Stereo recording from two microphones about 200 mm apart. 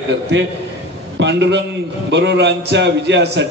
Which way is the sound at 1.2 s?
60° right (ahead or behind).